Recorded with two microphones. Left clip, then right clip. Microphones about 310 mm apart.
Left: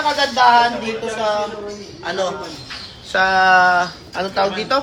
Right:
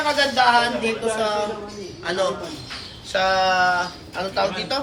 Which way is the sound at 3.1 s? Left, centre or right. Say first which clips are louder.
Left 5 dB; left.